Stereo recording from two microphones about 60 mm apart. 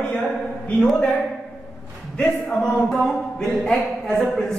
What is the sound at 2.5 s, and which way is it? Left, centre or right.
Speech, centre.